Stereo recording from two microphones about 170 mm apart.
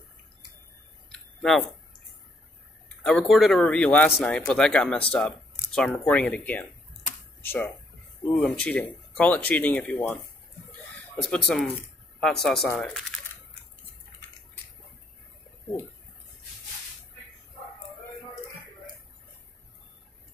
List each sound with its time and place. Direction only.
3.0 s a man's voice: centre (ahead or behind)
11.2 s a man's voice: 5° left (ahead or behind)